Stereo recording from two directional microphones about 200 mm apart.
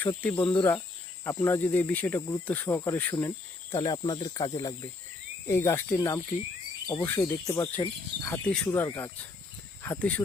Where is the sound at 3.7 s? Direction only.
20° left (ahead or behind).